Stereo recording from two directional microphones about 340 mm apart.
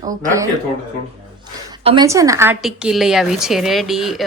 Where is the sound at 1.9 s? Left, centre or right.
Centre.